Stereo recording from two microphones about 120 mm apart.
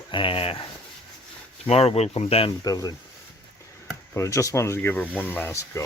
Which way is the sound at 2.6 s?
30° left (ahead or behind).